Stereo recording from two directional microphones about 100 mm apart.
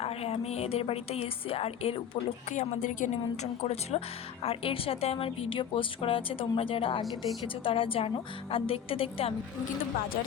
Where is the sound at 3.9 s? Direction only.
90° left.